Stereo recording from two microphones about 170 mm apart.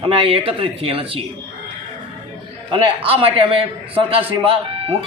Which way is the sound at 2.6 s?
30° right (ahead or behind).